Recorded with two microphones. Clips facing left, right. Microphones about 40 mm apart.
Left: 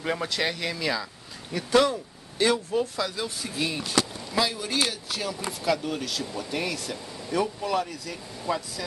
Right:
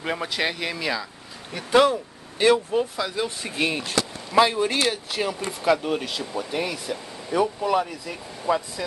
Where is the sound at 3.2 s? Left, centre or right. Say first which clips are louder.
Right 4 dB; right.